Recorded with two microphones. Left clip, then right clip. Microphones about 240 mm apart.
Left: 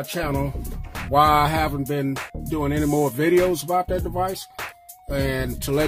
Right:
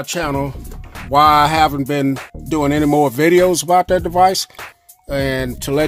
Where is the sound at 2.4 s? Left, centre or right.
Right.